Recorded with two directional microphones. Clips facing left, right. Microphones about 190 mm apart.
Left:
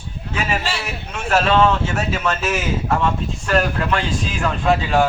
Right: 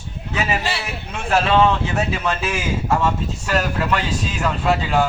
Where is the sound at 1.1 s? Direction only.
15° right (ahead or behind).